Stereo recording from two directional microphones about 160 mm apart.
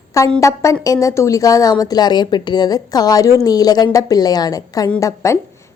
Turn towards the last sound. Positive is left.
turn(degrees=20)  # may be behind; listen again after turning